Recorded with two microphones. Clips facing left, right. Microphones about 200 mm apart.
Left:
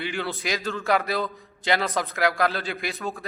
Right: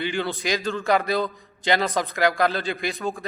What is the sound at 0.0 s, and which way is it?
A man's voice, 5° left (ahead or behind).